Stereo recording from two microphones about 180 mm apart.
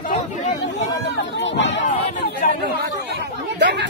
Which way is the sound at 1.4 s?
90° left.